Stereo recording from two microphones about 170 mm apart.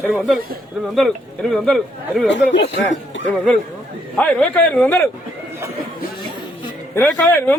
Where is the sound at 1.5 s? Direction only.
5° left (ahead or behind).